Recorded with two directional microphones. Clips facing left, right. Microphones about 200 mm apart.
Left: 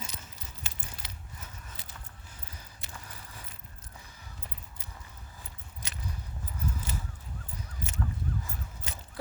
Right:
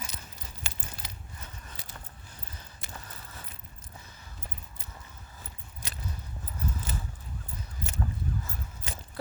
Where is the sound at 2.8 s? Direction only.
50° right (ahead or behind).